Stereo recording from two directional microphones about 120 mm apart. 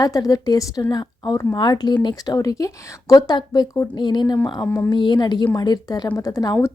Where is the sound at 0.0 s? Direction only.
30° left (ahead or behind).